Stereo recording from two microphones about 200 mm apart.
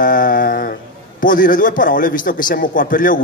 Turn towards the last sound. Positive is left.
turn(degrees=45)  # may be behind; listen again after turning